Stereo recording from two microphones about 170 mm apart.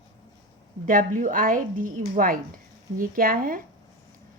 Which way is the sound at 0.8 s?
50° right (ahead or behind).